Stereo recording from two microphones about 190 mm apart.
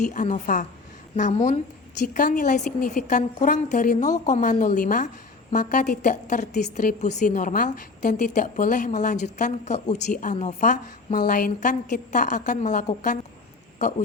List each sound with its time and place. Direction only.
0.0 s a woman's voice: 40° left (ahead or behind)